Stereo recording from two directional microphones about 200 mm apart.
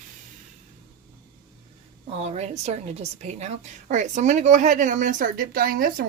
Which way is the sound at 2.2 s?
30° right (ahead or behind).